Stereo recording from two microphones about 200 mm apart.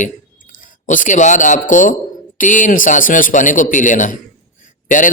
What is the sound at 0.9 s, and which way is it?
A man's voice, 40° left (ahead or behind).